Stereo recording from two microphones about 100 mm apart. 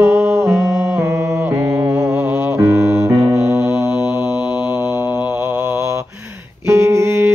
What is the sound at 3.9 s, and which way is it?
Mantra, 15° right (ahead or behind).